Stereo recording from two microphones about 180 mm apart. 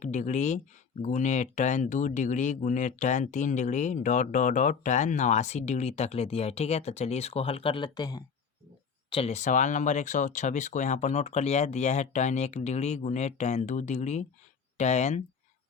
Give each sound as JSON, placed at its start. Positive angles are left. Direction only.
{"t": 0.0, "sound": "speech", "side_deg": 40}
{"t": 9.0, "sound": "speech", "side_deg": 30}